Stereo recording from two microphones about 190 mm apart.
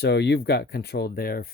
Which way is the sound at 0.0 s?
60° left (ahead or behind).